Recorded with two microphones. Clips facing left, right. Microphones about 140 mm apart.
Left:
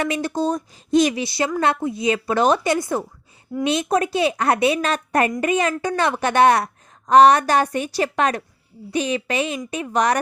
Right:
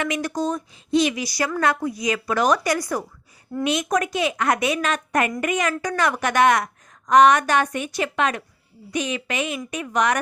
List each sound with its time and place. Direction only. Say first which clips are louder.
0.0 s a woman's voice: left 2 dB; 30° left (ahead or behind)
0.9 s speech: left 3 dB; 45° left (ahead or behind)
1.1 s a woman's voice: left 2 dB; 25° left (ahead or behind)